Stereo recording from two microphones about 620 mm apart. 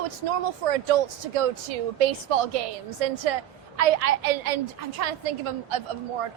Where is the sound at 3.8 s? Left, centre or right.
Right.